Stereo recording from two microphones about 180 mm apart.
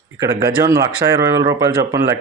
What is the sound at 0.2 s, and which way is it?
Speech, 15° right (ahead or behind).